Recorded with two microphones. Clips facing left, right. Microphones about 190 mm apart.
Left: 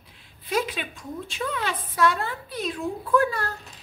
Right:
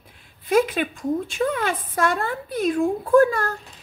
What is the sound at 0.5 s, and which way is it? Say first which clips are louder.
A woman's voice: right 8 dB; 50° right (ahead or behind).